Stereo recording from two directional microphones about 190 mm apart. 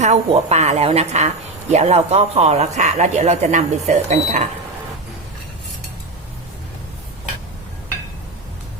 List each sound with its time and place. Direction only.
0.0 s speech: 35° right (ahead or behind)